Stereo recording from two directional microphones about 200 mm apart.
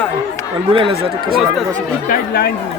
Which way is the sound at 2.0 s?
50° left (ahead or behind).